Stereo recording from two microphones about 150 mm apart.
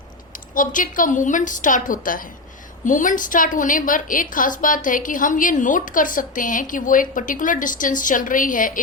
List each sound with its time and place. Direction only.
0.3 s a woman's voice: 65° left (ahead or behind)